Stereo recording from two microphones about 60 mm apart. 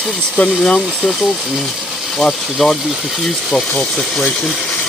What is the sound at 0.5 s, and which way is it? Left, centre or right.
Speech, centre.